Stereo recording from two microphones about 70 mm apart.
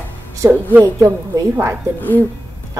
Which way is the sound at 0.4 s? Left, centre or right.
Right.